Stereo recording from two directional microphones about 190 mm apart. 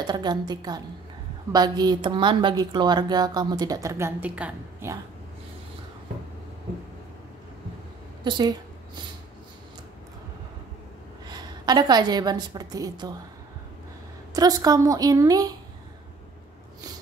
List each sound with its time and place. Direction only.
0.0 s a woman's voice: 20° right (ahead or behind)
8.2 s a woman's voice: 25° right (ahead or behind)
11.2 s a woman's voice: 20° right (ahead or behind)
14.3 s a woman's voice: 20° right (ahead or behind)